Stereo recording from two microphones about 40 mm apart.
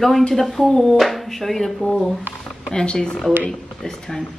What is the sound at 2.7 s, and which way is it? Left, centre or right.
Speech, left.